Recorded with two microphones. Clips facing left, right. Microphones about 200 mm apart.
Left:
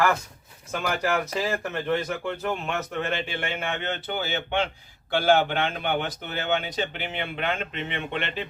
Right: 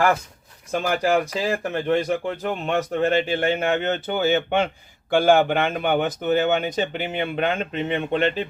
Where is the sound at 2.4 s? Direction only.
35° right (ahead or behind).